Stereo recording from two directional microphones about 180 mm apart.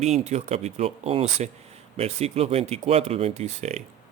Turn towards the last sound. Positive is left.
turn(degrees=-40)  # may be behind; listen again after turning